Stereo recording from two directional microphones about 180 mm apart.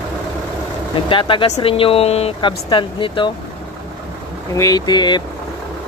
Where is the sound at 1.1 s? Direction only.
30° left (ahead or behind).